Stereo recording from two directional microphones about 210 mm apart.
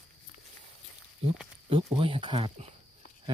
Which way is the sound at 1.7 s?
25° right (ahead or behind).